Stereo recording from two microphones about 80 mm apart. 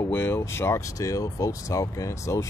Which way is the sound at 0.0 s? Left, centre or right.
Left.